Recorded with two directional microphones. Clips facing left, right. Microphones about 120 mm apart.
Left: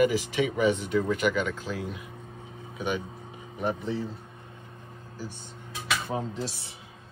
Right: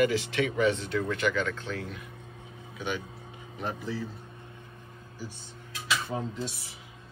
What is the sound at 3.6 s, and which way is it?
Speech, 20° left (ahead or behind).